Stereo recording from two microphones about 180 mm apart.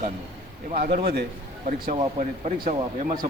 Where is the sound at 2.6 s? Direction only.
50° right (ahead or behind).